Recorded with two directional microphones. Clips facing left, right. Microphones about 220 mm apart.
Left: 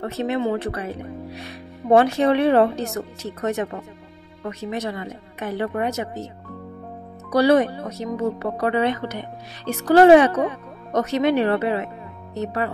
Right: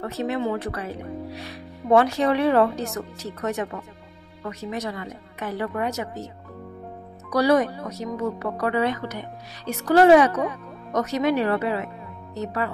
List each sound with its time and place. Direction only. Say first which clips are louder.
0.0 s speech: left 2 dB; 25° left (ahead or behind)
7.2 s speech: left 3 dB; 25° left (ahead or behind)